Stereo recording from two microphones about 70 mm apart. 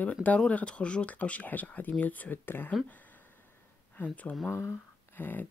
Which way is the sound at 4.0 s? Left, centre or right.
Left.